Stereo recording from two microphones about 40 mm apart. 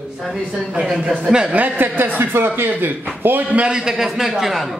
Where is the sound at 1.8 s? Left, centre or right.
Right.